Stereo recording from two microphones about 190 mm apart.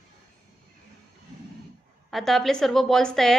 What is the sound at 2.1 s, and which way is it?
A woman's voice, centre (ahead or behind).